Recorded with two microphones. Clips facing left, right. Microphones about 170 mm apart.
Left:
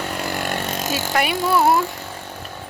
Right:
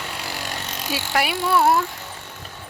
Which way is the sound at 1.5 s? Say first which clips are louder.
Left 1 dB; centre (ahead or behind).